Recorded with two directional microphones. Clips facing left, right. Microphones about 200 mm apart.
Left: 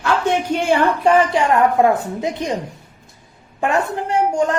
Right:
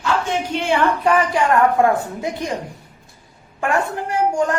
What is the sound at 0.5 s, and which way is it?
A woman's voice, 40° left (ahead or behind).